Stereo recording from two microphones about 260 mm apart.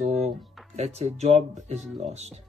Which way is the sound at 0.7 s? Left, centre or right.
Right.